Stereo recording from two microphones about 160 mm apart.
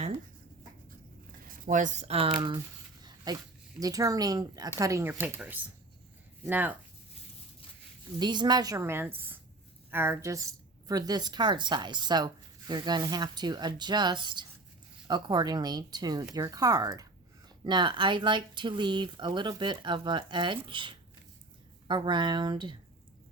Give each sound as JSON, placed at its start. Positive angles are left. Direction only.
{"t": 1.5, "sound": "a woman's voice", "side_deg": -55}
{"t": 8.2, "sound": "a woman's voice", "side_deg": -25}